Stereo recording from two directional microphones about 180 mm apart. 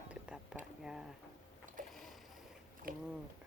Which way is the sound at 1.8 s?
45° right (ahead or behind).